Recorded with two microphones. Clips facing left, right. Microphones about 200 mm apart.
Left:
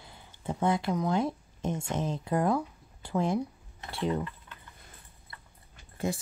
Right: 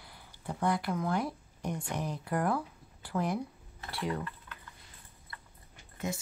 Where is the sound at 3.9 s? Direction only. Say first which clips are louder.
Left 5 dB; 25° left (ahead or behind).